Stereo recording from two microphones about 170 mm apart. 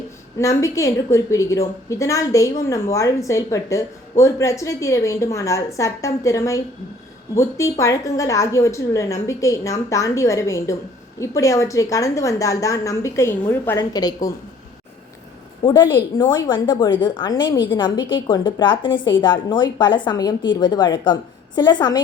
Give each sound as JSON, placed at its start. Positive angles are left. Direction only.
{"t": 0.3, "sound": "a woman's voice", "side_deg": 15}
{"t": 15.6, "sound": "a woman's voice", "side_deg": 25}